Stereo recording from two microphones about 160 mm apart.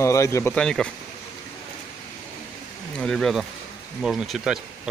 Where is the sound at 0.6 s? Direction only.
5° left (ahead or behind).